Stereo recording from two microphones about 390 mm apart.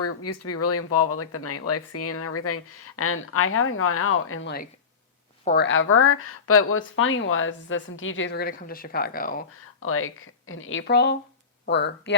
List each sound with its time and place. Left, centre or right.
0.0 s speech: left
9.8 s speech: left